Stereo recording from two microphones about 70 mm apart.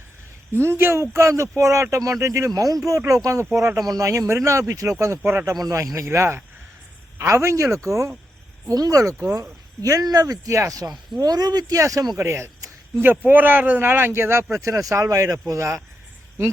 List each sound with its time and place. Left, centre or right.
0.5 s speech: right
2.5 s speech: right
3.2 s speech: right
5.5 s speech: right
6.1 s speech: right
8.7 s speech: right
12.1 s speech: right
13.0 s speech: right
14.1 s speech: right